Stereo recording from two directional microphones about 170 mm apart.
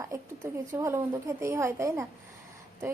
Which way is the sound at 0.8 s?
15° right (ahead or behind).